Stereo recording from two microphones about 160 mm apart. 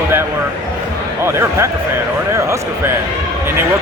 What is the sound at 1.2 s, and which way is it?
Speech, 15° right (ahead or behind).